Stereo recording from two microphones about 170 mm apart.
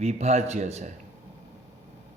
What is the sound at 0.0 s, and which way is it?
Speech, 40° right (ahead or behind).